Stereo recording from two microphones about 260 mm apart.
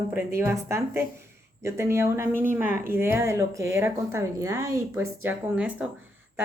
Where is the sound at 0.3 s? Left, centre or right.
Centre.